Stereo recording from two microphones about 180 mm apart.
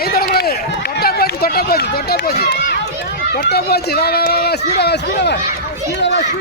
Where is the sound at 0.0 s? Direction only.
60° left (ahead or behind).